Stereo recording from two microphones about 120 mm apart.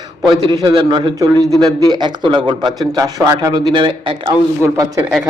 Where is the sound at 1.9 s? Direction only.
40° right (ahead or behind).